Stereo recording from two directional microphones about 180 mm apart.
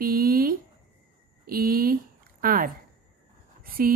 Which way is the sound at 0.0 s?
55° right (ahead or behind).